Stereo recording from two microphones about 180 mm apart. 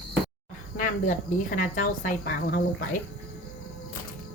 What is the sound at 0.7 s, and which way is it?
Speech, 50° left (ahead or behind).